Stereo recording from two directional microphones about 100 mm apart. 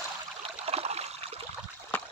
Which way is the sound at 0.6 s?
85° right.